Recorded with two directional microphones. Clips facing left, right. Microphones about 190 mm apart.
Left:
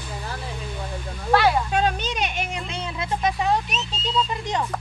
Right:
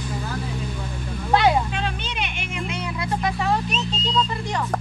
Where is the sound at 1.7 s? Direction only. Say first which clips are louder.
Left 5 dB; 45° left (ahead or behind); by 3.5 s 20° left (ahead or behind).